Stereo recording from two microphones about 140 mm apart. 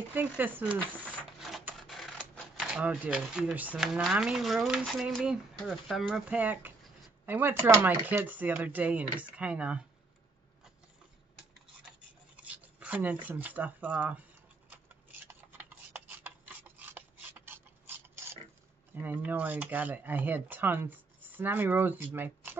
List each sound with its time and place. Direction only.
0.1 s speech: 15° right (ahead or behind)
1.8 s speech: centre (ahead or behind)
12.4 s speech: 10° right (ahead or behind)
14.7 s rub: 15° right (ahead or behind)
18.9 s speech: 15° right (ahead or behind)